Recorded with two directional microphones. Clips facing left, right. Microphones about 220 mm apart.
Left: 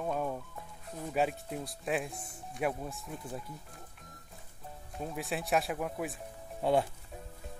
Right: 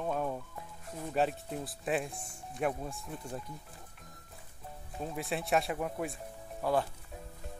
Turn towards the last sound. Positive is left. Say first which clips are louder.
# left 2 dB
turn(degrees=25)  # may be behind; listen again after turning